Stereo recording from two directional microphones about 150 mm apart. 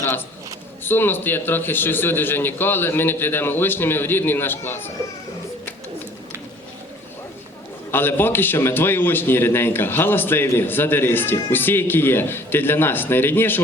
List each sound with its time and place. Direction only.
0.0 s a sound: 15° left (ahead or behind)
0.9 s a man's voice: 15° left (ahead or behind)
7.9 s a man's voice: 15° left (ahead or behind)